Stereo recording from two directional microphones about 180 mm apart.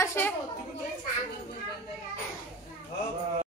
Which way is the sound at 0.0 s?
15° left (ahead or behind).